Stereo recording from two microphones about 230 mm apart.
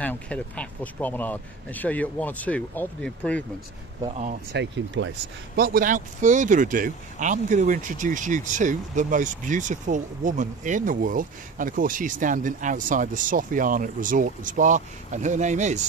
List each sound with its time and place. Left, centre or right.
0.0 s speech: centre
4.5 s speech: right
5.6 s speech: right